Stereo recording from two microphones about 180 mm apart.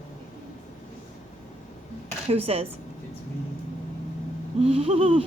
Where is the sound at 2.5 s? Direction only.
35° right (ahead or behind).